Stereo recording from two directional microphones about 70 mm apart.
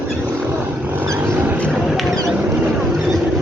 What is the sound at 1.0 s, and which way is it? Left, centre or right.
Vehicle, right.